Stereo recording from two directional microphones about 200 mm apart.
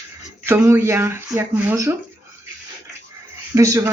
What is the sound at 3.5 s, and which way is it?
Speech, 15° right (ahead or behind).